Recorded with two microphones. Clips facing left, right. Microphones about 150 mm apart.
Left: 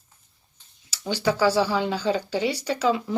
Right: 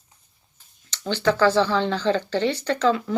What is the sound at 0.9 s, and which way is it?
Speech, 10° left (ahead or behind).